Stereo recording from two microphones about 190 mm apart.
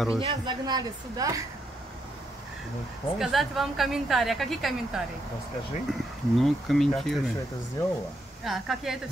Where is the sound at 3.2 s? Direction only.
Centre (ahead or behind).